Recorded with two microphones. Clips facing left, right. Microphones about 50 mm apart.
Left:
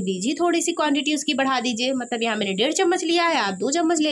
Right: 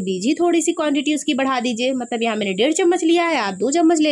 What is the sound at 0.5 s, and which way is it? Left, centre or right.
A woman's voice, right.